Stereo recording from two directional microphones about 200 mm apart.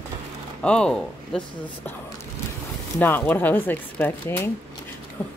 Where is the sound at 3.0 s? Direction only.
10° left (ahead or behind).